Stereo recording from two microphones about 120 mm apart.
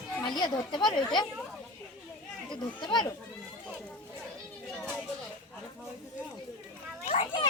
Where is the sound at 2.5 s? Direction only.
40° left (ahead or behind).